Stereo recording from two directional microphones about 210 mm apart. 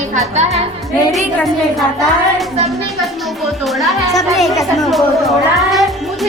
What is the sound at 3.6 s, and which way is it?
Music, centre (ahead or behind).